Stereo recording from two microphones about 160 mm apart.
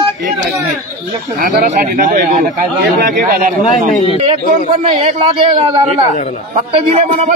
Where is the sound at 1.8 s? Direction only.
55° right (ahead or behind).